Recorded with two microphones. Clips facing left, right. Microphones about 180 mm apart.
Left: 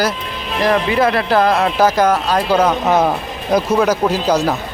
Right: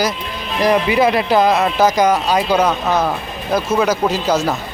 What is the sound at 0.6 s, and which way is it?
Speech, 15° right (ahead or behind).